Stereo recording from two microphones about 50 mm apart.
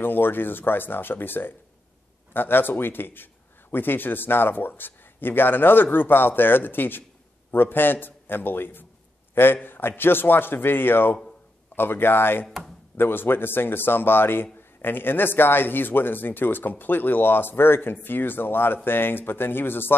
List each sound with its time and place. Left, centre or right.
0.0 s a man's voice: left
12.4 s speech: centre
12.9 s a man's voice: left